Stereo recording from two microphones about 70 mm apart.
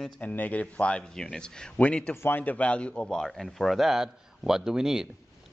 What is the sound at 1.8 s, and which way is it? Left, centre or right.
A man's voice, left.